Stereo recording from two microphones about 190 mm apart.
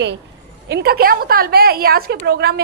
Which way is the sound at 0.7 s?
55° right (ahead or behind).